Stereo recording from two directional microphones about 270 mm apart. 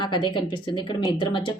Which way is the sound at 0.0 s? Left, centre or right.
Centre.